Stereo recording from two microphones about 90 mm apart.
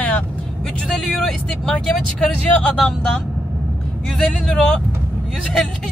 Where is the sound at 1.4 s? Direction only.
10° left (ahead or behind).